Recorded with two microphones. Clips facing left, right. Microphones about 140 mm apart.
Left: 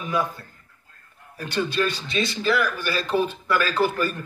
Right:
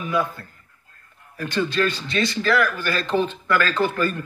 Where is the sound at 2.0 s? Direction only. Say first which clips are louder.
Right 1 dB; 25° left (ahead or behind).